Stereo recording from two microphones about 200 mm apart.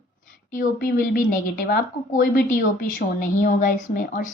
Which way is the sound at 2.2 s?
45° left (ahead or behind).